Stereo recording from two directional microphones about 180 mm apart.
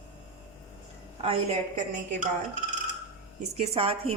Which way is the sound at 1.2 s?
35° right (ahead or behind).